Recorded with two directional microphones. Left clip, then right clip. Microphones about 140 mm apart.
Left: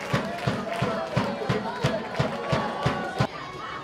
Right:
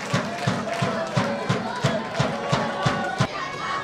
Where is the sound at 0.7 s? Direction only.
35° right (ahead or behind).